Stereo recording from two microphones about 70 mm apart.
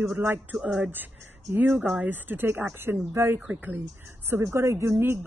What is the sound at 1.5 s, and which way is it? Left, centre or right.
A woman's voice, right.